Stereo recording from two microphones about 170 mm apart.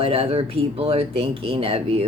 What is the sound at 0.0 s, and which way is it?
Speech, 35° right (ahead or behind).